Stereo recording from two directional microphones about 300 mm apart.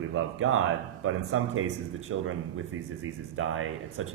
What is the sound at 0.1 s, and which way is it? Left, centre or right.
Speech, right.